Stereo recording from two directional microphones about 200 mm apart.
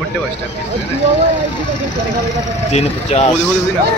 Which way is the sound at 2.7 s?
30° left (ahead or behind).